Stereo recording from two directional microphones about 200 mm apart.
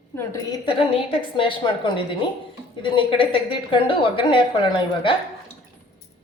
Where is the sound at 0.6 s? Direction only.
25° left (ahead or behind).